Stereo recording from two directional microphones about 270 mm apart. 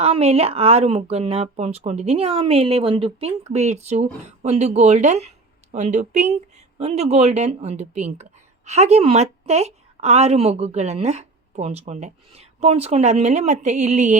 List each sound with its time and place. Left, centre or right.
0.0 s speech: right